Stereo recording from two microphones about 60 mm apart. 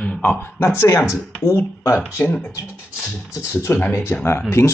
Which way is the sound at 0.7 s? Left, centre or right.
Left.